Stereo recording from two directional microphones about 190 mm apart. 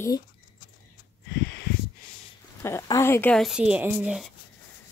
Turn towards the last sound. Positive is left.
turn(degrees=-5)  # may be behind; listen again after turning